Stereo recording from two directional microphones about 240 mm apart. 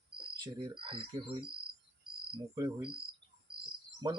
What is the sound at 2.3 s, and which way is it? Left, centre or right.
Speech, centre.